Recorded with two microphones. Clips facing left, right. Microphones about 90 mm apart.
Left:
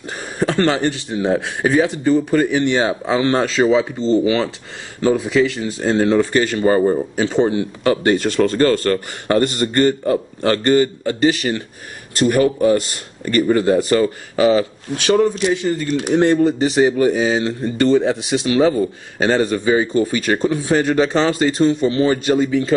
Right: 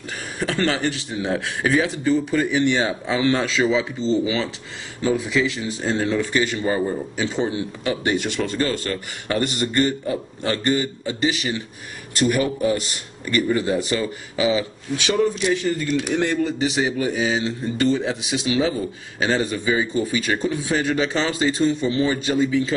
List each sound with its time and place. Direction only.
0.4 s speech: 35° left (ahead or behind)
1.3 s speech: 25° left (ahead or behind)
2.5 s speech: 40° left (ahead or behind)
5.0 s speech: 40° left (ahead or behind)
5.4 s speech: 50° left (ahead or behind)